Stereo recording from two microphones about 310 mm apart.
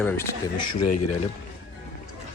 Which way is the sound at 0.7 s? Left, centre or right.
Left.